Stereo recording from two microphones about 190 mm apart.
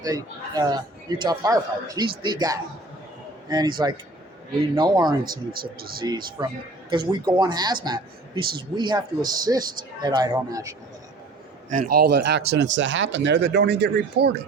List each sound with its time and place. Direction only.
0.0 s speech: 20° right (ahead or behind)
5.5 s speech: 50° right (ahead or behind)
6.0 s speech: 20° right (ahead or behind)
11.7 s speech: 50° right (ahead or behind)